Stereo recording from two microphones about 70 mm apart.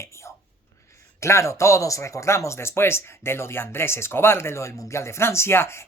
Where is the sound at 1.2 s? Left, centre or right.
Left.